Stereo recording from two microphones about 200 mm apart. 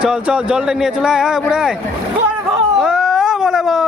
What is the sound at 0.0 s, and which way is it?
Speech, 5° right (ahead or behind).